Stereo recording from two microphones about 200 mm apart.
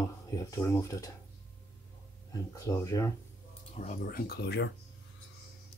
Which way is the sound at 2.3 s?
15° left (ahead or behind).